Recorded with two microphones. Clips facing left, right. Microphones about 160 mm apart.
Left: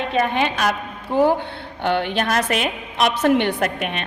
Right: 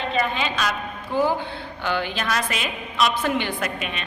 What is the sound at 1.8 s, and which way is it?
A woman's voice, 60° left (ahead or behind).